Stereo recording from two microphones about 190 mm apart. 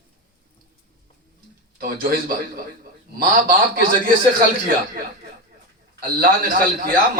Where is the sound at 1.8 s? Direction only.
50° right (ahead or behind).